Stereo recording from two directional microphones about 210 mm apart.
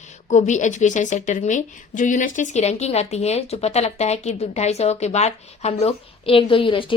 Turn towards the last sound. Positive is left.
turn(degrees=25)  # may be behind; listen again after turning